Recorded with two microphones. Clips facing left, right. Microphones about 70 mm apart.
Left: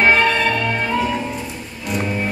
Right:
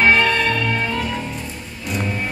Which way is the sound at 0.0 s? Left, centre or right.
Centre.